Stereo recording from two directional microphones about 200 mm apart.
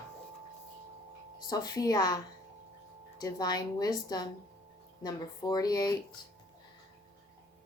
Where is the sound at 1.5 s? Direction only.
20° left (ahead or behind).